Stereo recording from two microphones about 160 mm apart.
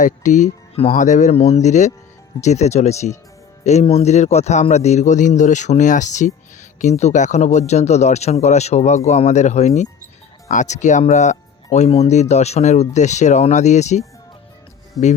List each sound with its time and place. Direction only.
0.0 s speech: 50° left (ahead or behind)